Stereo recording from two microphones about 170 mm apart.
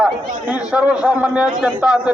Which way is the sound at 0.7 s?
5° right (ahead or behind).